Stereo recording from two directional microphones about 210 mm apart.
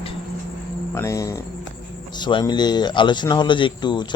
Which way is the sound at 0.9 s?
15° left (ahead or behind).